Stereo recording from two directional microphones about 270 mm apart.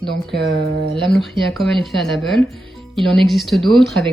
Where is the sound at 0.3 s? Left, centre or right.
Right.